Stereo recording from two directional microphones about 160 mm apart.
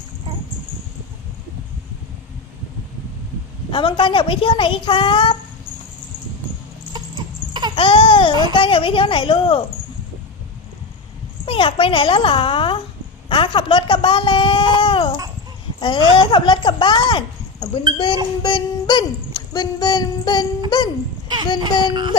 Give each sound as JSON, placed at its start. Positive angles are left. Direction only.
{"t": 3.7, "sound": "speech", "side_deg": 30}
{"t": 7.8, "sound": "speech", "side_deg": 30}
{"t": 11.4, "sound": "speech", "side_deg": 35}